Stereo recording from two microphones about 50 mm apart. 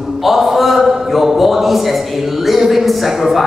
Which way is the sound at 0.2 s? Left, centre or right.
Centre.